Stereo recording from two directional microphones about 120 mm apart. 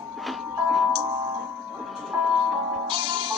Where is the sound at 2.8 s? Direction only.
45° right (ahead or behind).